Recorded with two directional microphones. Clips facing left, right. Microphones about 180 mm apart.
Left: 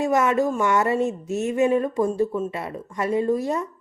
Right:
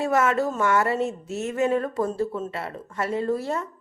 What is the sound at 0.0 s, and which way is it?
Speech, 20° left (ahead or behind).